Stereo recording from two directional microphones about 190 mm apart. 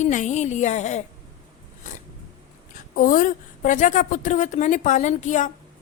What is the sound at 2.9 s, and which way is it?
A woman's voice, 45° left (ahead or behind).